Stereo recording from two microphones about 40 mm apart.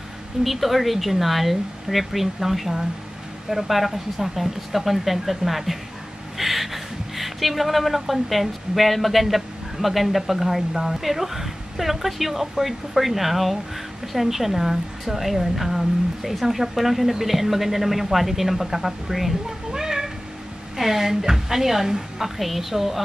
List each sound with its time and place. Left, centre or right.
0.4 s speech: centre
19.7 s cat: centre
20.7 s a woman's voice: centre